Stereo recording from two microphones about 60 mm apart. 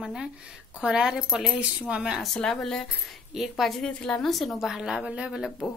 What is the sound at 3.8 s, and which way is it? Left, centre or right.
Speech, centre.